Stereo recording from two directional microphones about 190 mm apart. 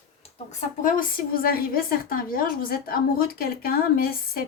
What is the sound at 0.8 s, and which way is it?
A woman's voice, 45° left (ahead or behind).